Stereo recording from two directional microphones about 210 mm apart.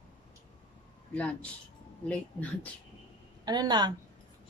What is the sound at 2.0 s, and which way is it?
Speech, 5° left (ahead or behind).